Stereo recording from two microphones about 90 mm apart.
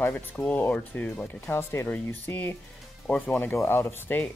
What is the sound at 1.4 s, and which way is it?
Speech, 30° left (ahead or behind).